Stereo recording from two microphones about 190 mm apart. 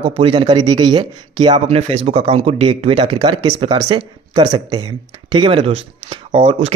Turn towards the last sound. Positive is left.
turn(degrees=-35)  # may be behind; listen again after turning